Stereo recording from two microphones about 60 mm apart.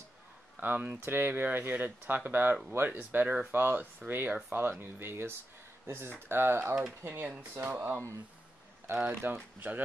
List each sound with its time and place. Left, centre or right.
0.6 s speech: right
8.9 s speech: right
9.2 s speech: right